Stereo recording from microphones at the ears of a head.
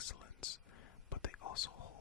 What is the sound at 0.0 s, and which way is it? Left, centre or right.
Whispering, left.